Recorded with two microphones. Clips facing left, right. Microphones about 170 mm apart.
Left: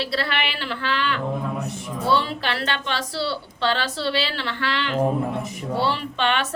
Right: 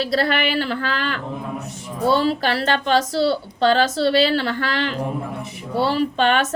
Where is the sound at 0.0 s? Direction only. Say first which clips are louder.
Right 6 dB; 40° right (ahead or behind).